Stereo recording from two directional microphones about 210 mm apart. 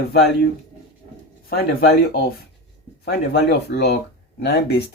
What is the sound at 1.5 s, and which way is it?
Speech, 45° left (ahead or behind).